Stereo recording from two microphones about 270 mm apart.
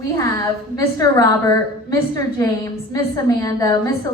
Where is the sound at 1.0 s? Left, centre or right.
Centre.